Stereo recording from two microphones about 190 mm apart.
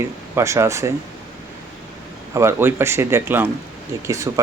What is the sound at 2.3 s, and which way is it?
A man's voice, 15° right (ahead or behind).